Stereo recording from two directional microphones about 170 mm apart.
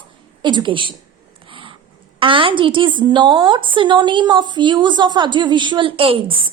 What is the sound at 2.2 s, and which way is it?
A woman's voice, 30° right (ahead or behind).